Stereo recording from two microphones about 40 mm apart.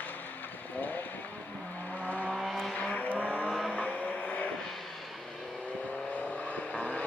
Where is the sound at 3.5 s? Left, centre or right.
Centre.